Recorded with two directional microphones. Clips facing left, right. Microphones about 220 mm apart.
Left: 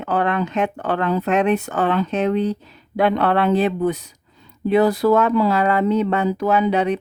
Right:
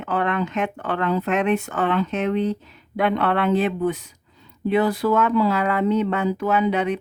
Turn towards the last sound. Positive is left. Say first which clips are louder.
# left 3 dB
turn(degrees=35)  # may be behind; listen again after turning